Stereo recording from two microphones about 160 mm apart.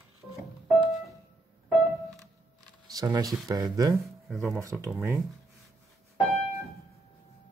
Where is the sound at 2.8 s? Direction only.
25° right (ahead or behind).